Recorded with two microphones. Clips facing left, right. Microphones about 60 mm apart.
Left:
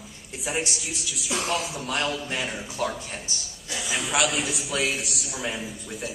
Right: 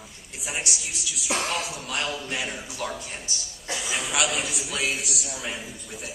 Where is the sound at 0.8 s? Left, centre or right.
Centre.